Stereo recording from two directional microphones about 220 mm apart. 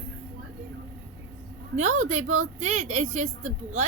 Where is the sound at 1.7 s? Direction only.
30° right (ahead or behind).